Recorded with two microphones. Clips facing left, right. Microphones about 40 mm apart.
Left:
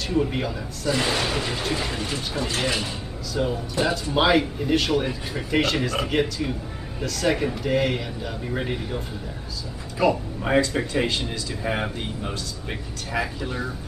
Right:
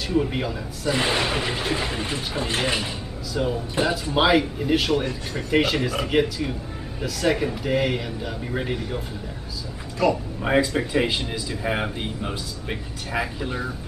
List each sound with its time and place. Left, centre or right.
0.1 s speech: centre
0.9 s speech: right
3.3 s speech: centre
10.4 s a man's voice: centre